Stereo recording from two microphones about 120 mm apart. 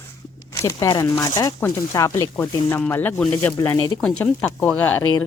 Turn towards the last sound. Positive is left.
turn(degrees=15)  # may be behind; listen again after turning